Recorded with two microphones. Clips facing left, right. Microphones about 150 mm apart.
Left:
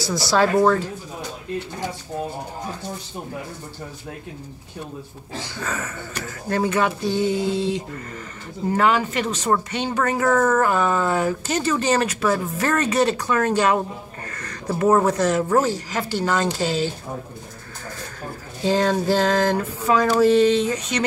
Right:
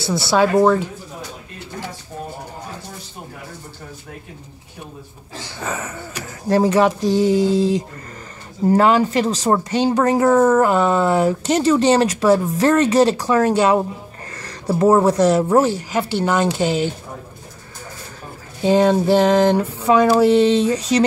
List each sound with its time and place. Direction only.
0.0 s speech: 25° right (ahead or behind)
5.6 s speech: 25° right (ahead or behind)
14.8 s speech: 30° right (ahead or behind)
15.7 s speech: 10° right (ahead or behind)
18.6 s speech: 15° right (ahead or behind); by 21.0 s 35° right (ahead or behind)